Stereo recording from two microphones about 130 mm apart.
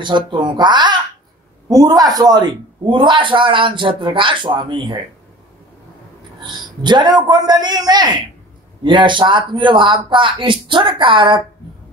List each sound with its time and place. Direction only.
0.0 s a man's voice: 35° right (ahead or behind)
6.4 s a man's voice: 35° right (ahead or behind)